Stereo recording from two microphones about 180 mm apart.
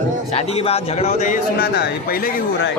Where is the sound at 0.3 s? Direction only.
35° left (ahead or behind); by 2.3 s 55° left (ahead or behind).